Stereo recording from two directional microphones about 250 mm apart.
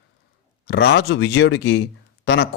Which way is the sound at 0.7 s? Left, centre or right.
Left.